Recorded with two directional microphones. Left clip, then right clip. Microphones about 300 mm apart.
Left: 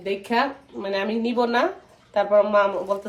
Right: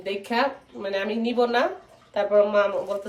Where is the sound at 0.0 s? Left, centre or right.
Centre.